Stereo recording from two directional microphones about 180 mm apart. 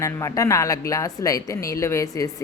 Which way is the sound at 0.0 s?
20° left (ahead or behind).